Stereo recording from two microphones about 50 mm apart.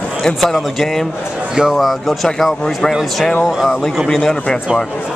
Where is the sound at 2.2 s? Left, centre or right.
Centre.